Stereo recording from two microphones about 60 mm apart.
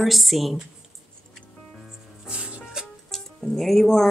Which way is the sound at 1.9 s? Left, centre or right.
Centre.